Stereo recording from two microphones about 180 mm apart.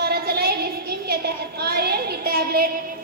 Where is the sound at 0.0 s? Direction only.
60° right (ahead or behind).